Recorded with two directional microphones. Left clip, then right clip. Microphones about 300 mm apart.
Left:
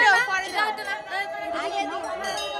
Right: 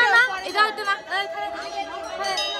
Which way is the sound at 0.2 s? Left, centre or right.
Right.